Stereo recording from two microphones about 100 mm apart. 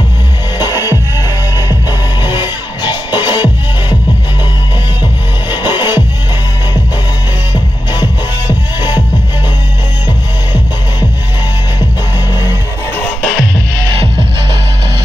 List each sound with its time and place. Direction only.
0.6 s music: 35° left (ahead or behind)
5.0 s music: 45° left (ahead or behind)
13.2 s music: 5° left (ahead or behind)